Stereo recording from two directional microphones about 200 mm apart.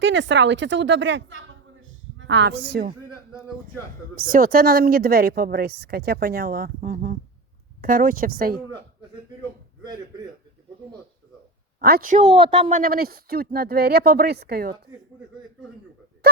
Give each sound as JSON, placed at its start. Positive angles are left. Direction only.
{"t": 0.0, "sound": "a woman's voice", "side_deg": -65}
{"t": 4.1, "sound": "speech", "side_deg": -45}
{"t": 11.8, "sound": "speech", "side_deg": -45}
{"t": 12.3, "sound": "a woman's voice", "side_deg": -30}
{"t": 12.8, "sound": "speech", "side_deg": -45}